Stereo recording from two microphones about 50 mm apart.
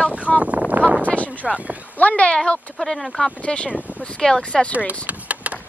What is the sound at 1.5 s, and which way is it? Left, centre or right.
Speech, right.